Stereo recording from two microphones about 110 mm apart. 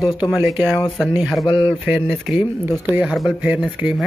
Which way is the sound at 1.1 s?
10° right (ahead or behind).